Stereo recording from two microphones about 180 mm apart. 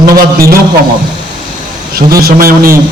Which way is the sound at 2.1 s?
55° right (ahead or behind).